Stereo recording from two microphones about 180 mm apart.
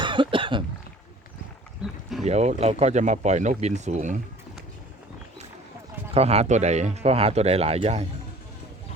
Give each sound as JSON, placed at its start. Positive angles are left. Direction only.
{"t": 0.0, "sound": "cough", "side_deg": -25}
{"t": 1.8, "sound": "a sound", "side_deg": 0}
{"t": 2.2, "sound": "speech", "side_deg": -40}
{"t": 6.1, "sound": "speech", "side_deg": -35}